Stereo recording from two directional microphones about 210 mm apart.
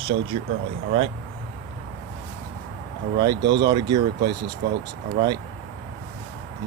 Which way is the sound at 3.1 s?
20° right (ahead or behind).